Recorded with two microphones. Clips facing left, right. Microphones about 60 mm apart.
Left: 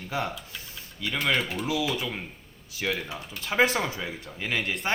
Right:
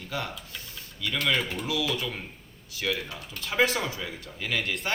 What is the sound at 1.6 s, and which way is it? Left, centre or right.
Speech, left.